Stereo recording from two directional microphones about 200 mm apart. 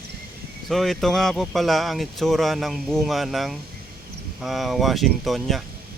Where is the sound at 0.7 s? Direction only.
Centre (ahead or behind).